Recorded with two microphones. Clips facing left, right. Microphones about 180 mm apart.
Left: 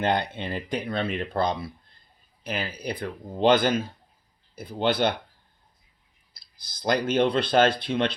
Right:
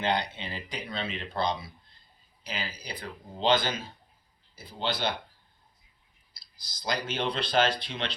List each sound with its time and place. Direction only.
0.0 s speech: 50° left (ahead or behind)
6.3 s speech: 55° left (ahead or behind)